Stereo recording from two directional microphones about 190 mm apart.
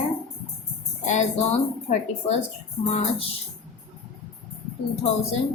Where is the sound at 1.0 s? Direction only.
40° left (ahead or behind).